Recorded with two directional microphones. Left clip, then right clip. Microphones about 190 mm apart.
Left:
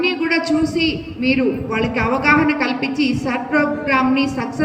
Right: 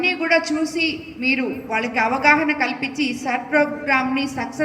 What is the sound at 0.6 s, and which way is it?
Speech, 5° left (ahead or behind).